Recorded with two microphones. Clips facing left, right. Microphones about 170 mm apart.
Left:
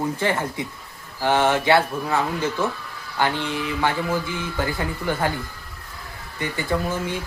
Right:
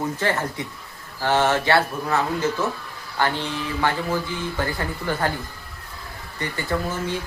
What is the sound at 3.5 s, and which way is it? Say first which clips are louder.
Speech: left 1 dB; 15° left (ahead or behind).